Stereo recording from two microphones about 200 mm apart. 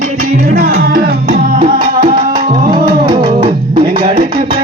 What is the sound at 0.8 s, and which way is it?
Music, 50° right (ahead or behind).